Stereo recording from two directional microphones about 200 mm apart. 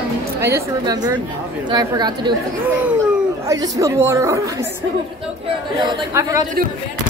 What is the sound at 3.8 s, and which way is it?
Speech, 15° right (ahead or behind).